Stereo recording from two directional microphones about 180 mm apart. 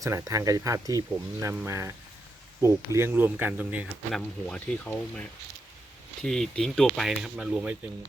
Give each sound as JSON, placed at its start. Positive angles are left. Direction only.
{"t": 0.0, "sound": "speech", "side_deg": -15}
{"t": 4.1, "sound": "speech", "side_deg": 5}
{"t": 6.2, "sound": "speech", "side_deg": 5}